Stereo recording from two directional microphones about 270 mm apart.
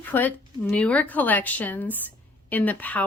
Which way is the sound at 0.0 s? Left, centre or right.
Centre.